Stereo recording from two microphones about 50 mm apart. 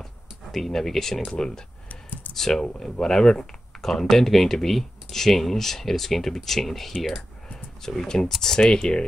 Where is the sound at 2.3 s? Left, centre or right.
Centre.